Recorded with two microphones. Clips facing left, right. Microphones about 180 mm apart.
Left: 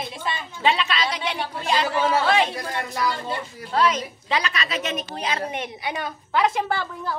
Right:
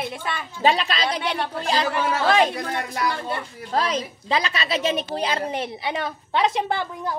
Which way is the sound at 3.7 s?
35° right (ahead or behind).